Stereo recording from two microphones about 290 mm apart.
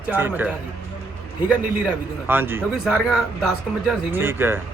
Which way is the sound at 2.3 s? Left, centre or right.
Centre.